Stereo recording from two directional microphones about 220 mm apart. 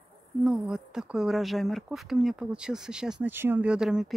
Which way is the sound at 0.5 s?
5° right (ahead or behind).